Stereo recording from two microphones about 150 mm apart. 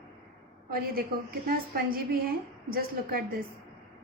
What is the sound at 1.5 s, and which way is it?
A woman's voice, 80° right.